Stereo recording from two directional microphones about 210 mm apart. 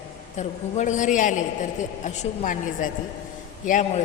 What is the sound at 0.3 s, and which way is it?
A woman's voice, 35° left (ahead or behind).